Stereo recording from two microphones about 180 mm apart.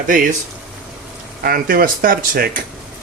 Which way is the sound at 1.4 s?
55° right (ahead or behind).